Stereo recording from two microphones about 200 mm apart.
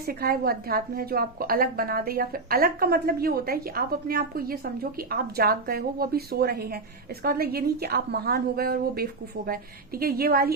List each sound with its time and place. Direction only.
0.0 s a woman's voice: 50° right (ahead or behind)